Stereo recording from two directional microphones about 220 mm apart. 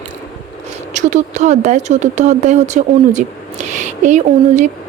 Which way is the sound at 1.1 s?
30° right (ahead or behind).